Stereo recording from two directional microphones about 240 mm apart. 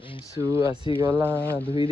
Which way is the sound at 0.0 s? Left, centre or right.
Left.